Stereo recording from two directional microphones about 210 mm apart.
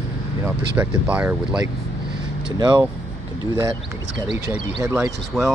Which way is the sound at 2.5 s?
20° right (ahead or behind).